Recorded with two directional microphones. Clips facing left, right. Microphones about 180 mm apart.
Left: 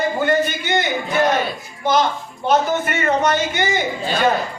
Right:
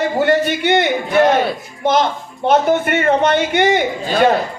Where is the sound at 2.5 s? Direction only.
60° right (ahead or behind).